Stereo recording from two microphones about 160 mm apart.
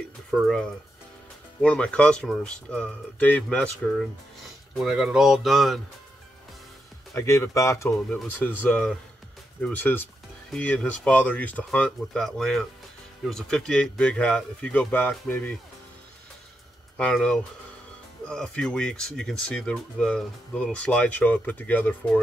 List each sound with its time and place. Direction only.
0.3 s speech: centre (ahead or behind)
7.2 s speech: 20° left (ahead or behind)
16.9 s speech: 5° left (ahead or behind)